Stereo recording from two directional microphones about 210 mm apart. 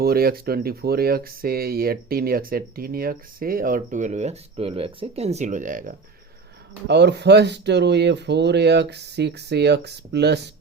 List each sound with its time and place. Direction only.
0.0 s speech: 45° right (ahead or behind)
6.8 s speech: 55° right (ahead or behind)